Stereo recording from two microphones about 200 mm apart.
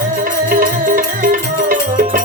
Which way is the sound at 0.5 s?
45° right (ahead or behind).